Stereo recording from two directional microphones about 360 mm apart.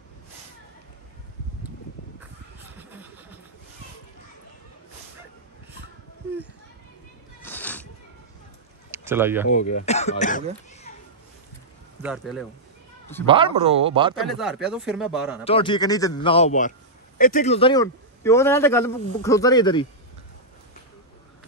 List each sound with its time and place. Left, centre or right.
2.7 s vehicle: centre
7.4 s a sound: centre
8.9 s speech: centre
9.5 s speech: centre
12.0 s speech: centre
13.3 s speech: centre
14.2 s speech: centre
15.4 s a man's voice: centre